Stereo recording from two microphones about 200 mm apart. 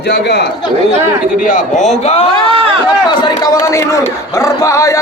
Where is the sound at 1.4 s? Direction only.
40° left (ahead or behind).